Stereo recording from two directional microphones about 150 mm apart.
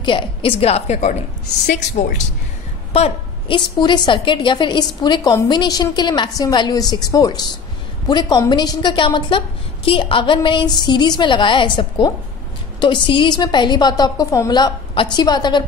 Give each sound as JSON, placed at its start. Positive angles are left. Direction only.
{"t": 0.0, "sound": "a woman's voice", "side_deg": 35}
{"t": 2.9, "sound": "a woman's voice", "side_deg": 40}